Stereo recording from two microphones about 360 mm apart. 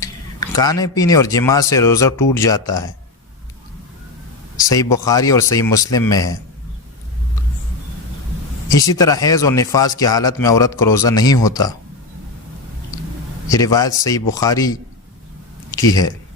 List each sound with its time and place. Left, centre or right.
0.0 s speech: centre
4.5 s speech: centre
8.7 s speech: centre
13.5 s speech: centre
15.9 s speech: centre